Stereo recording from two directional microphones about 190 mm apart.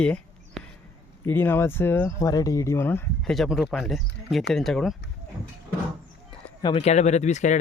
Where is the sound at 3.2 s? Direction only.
Centre (ahead or behind).